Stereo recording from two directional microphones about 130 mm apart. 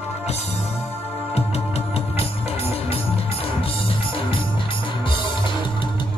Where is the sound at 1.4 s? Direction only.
50° left (ahead or behind).